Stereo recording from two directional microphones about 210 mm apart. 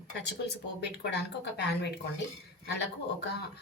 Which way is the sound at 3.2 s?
50° left (ahead or behind).